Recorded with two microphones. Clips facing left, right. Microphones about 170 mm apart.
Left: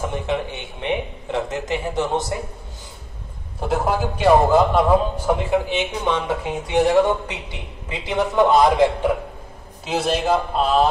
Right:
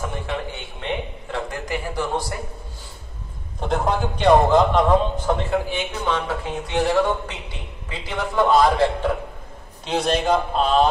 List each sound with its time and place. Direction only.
0.0 s speech: 20° left (ahead or behind)
3.6 s a man's voice: 5° left (ahead or behind)
9.8 s a man's voice: 5° left (ahead or behind)